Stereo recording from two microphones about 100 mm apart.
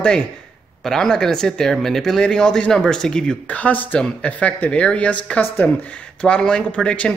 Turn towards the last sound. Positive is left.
turn(degrees=10)  # may be behind; listen again after turning